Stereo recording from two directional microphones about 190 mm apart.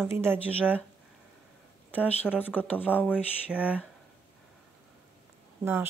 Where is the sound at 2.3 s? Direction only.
10° left (ahead or behind).